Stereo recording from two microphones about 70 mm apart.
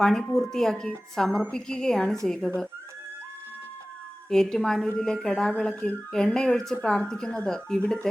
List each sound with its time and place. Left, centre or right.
0.0 s a woman's voice: centre
4.3 s a woman's voice: centre